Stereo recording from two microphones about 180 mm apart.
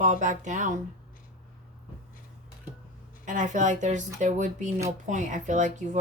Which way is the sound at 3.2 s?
45° right (ahead or behind).